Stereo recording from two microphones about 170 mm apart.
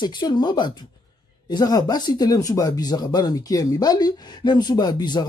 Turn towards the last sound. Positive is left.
turn(degrees=25)  # may be behind; listen again after turning